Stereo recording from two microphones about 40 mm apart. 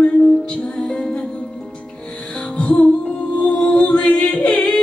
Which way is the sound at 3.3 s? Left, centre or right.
Left.